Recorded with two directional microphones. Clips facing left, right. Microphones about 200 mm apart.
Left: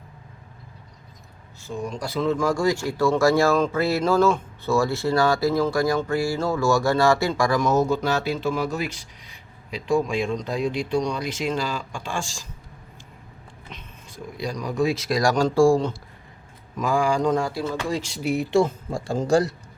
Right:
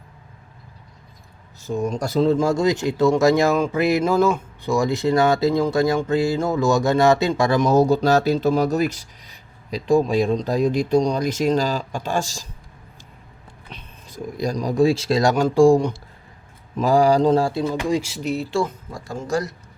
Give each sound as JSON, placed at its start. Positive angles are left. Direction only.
{"t": 1.6, "sound": "speech", "side_deg": -40}
{"t": 14.3, "sound": "speech", "side_deg": -40}
{"t": 16.7, "sound": "speech", "side_deg": -35}
{"t": 17.6, "sound": "speech", "side_deg": -15}
{"t": 18.2, "sound": "speech", "side_deg": 10}
{"t": 18.5, "sound": "speech", "side_deg": 25}